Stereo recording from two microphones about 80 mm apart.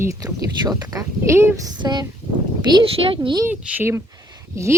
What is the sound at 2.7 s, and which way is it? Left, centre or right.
Speech, right.